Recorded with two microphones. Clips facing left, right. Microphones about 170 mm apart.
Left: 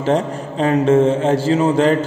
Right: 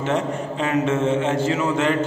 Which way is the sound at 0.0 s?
35° left (ahead or behind).